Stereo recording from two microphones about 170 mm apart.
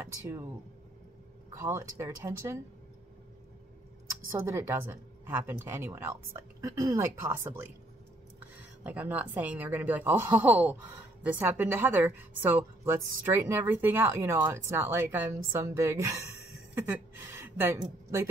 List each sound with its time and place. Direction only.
1.5 s a woman's voice: 15° right (ahead or behind)
4.4 s a woman's voice: 15° right (ahead or behind)
8.8 s a woman's voice: 10° right (ahead or behind)